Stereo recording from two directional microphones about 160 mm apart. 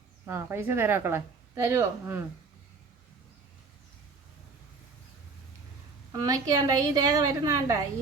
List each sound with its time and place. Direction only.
0.3 s a woman's voice: 15° right (ahead or behind)
6.1 s a woman's voice: 20° right (ahead or behind)